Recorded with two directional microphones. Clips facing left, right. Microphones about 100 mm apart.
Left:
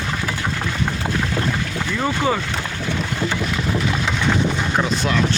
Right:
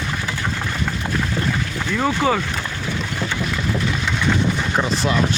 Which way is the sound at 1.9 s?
Centre (ahead or behind).